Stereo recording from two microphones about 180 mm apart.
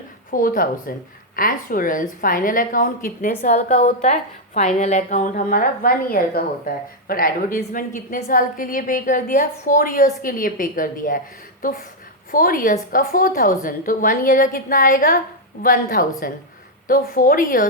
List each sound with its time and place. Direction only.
0.3 s a woman's voice: 50° left (ahead or behind)